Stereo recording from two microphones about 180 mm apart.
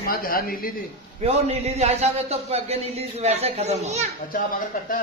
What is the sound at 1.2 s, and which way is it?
A man's voice, 35° right (ahead or behind).